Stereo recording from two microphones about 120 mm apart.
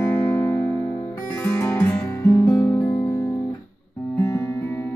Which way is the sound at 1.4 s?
20° left (ahead or behind).